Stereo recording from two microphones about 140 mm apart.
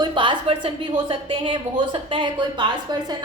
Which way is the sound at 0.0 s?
35° right (ahead or behind).